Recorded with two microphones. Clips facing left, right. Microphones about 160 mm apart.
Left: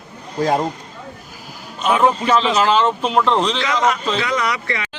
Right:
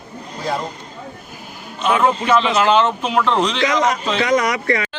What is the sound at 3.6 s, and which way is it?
A man's voice, 40° right (ahead or behind).